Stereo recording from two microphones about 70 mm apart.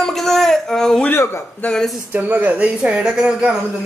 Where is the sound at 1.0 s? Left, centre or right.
Left.